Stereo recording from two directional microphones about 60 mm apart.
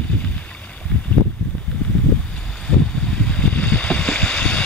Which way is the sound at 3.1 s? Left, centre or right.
Centre.